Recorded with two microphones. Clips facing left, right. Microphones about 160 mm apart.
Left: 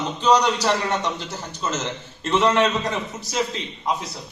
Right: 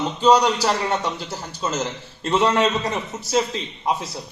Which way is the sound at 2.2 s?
30° right (ahead or behind).